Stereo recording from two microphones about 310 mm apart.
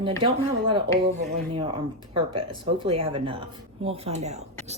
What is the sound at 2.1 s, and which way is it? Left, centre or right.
Speech, centre.